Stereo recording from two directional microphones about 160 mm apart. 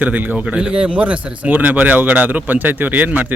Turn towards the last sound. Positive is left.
turn(degrees=-10)  # may be behind; listen again after turning